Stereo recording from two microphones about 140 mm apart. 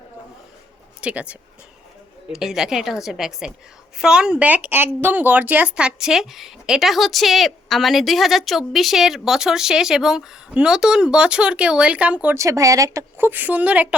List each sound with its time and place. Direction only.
1.0 s speech: 10° right (ahead or behind)
12.4 s speech: 25° right (ahead or behind)